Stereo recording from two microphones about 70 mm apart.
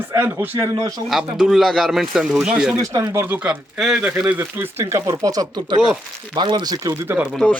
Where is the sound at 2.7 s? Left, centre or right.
Right.